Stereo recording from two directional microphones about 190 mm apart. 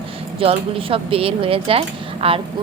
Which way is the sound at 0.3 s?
30° right (ahead or behind).